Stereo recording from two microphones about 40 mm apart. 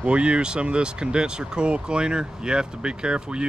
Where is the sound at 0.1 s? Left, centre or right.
Right.